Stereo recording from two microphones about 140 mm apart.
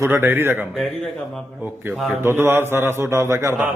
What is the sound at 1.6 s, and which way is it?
A man's voice, 10° right (ahead or behind).